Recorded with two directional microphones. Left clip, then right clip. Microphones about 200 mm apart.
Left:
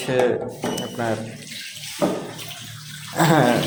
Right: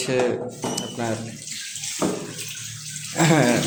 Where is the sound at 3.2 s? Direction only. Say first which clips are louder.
Left 2 dB; 25° right (ahead or behind).